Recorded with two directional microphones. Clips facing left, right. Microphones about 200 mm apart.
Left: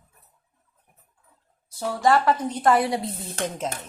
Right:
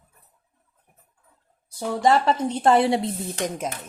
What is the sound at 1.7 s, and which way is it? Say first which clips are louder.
Speech: right 1 dB; 20° right (ahead or behind).